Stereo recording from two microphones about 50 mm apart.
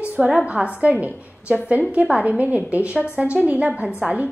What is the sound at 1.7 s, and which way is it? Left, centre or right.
A woman's voice, right.